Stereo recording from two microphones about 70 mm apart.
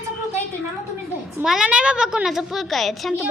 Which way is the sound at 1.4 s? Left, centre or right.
Centre.